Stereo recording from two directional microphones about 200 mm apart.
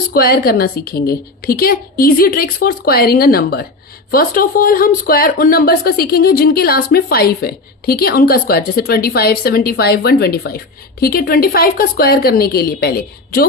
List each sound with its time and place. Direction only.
0.1 s speech: 50° left (ahead or behind)